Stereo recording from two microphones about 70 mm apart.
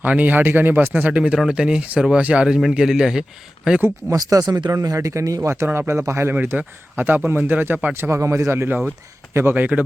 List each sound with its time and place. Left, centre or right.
0.0 s a man's voice: right
2.6 s a man's voice: centre
4.1 s speech: right
5.6 s speech: right
6.3 s a man's voice: right
9.6 s a man's voice: right